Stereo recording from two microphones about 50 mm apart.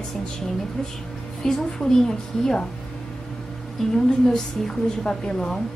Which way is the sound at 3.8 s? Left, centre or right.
Centre.